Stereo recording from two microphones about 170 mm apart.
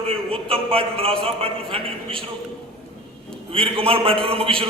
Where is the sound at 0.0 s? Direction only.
35° right (ahead or behind).